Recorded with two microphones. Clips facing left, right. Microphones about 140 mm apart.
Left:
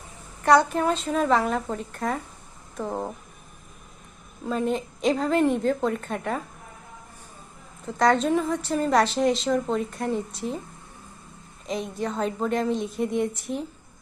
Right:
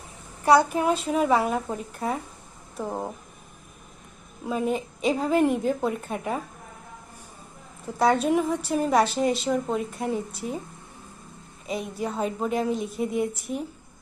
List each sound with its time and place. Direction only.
0.4 s a woman's voice: 5° right (ahead or behind)
4.4 s a woman's voice: 5° right (ahead or behind)
7.9 s a woman's voice: 5° right (ahead or behind)
11.6 s a woman's voice: 5° right (ahead or behind)